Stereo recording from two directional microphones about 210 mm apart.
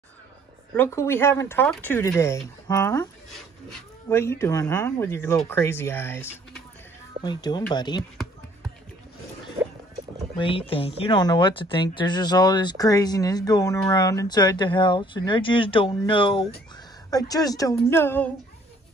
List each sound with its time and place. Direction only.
0.7 s speech: 10° left (ahead or behind)
10.3 s speech: 25° left (ahead or behind)